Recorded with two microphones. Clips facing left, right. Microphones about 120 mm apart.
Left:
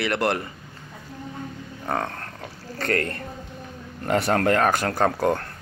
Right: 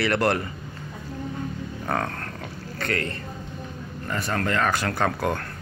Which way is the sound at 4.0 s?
70° left (ahead or behind).